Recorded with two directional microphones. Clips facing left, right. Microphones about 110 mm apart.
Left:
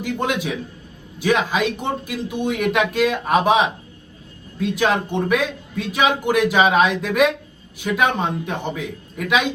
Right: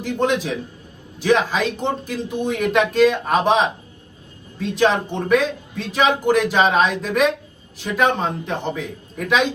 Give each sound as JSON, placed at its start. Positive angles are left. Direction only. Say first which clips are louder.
{"t": 0.0, "sound": "a man's voice", "louder": "right 2 dB", "side_deg": 5}